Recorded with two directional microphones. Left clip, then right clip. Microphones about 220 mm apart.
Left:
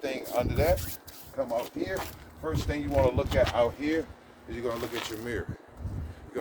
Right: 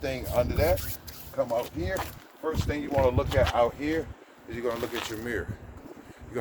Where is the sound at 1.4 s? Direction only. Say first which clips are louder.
Right 1 dB; 10° right (ahead or behind).